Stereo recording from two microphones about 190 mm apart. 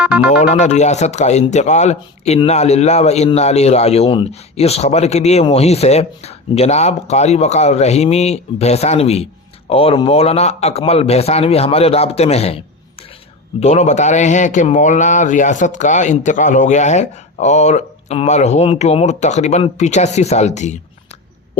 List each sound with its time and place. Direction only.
0.0 s speech: 5° right (ahead or behind)
0.3 s speech: 40° left (ahead or behind)